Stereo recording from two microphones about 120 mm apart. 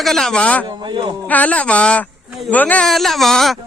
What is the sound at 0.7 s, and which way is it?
Speech, 40° right (ahead or behind).